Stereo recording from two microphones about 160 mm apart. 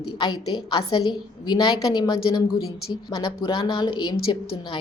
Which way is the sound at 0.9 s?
25° left (ahead or behind).